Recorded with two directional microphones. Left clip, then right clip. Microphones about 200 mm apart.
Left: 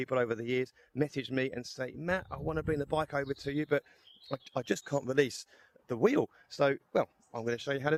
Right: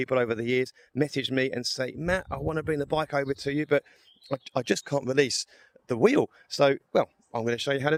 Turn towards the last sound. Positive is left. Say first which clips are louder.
# right 6 dB
turn(degrees=-45)  # may be behind; listen again after turning